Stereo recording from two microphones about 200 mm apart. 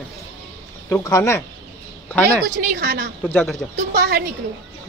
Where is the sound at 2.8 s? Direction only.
60° right (ahead or behind).